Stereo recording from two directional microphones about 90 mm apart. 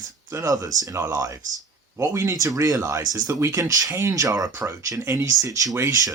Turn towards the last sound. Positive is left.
turn(degrees=-35)  # may be behind; listen again after turning